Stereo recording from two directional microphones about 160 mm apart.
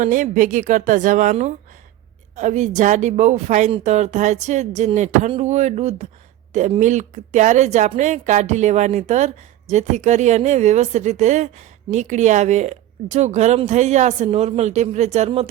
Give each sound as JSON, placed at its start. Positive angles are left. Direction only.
{"t": 0.0, "sound": "a woman's voice", "side_deg": -55}